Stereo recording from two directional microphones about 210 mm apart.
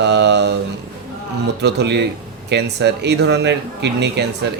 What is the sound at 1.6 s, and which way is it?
Speech, 55° right (ahead or behind).